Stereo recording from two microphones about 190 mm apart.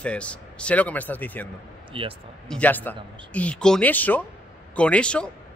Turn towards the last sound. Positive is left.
turn(degrees=5)  # may be behind; listen again after turning